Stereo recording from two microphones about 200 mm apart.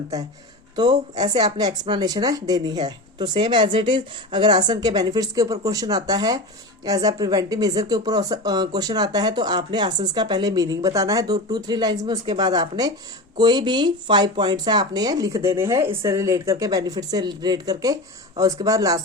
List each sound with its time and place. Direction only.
0.8 s speech: 20° right (ahead or behind)